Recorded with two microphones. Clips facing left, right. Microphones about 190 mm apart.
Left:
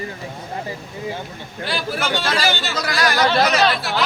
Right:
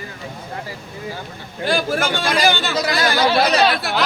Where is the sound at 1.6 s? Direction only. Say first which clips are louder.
Right 5 dB; 45° right (ahead or behind).